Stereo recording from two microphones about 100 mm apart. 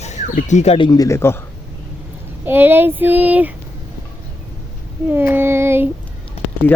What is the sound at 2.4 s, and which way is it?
Speech, 20° right (ahead or behind).